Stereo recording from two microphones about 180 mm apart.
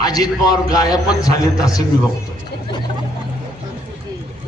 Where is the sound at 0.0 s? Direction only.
20° left (ahead or behind).